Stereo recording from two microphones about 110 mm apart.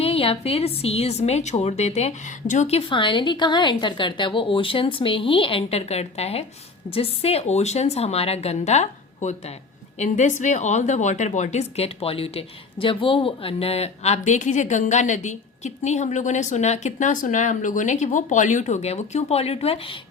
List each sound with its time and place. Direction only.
0.0 s a woman's voice: 60° left (ahead or behind); by 2.8 s 80° left
2.9 s a woman's voice: 50° left (ahead or behind)